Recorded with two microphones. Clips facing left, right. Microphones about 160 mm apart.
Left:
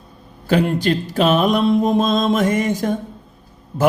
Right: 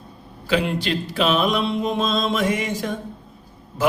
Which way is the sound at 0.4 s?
45° left (ahead or behind).